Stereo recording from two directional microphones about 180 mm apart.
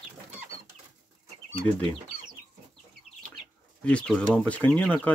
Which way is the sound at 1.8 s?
30° right (ahead or behind).